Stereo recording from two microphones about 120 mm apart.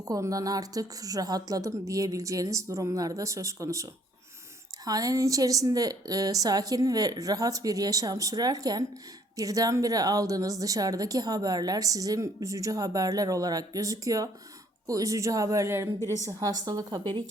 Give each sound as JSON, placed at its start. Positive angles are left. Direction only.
{"t": 0.0, "sound": "a woman's voice", "side_deg": -30}
{"t": 4.9, "sound": "a woman's voice", "side_deg": -30}